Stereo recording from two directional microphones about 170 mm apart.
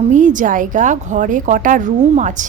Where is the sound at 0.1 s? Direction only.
45° right (ahead or behind).